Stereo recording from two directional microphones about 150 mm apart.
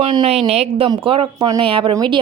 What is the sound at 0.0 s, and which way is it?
Speech, 30° right (ahead or behind).